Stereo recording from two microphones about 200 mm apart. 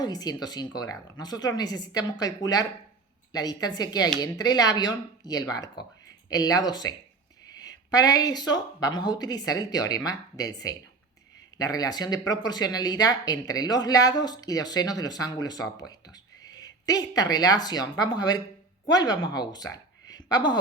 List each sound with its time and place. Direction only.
0.0 s speech: 20° left (ahead or behind)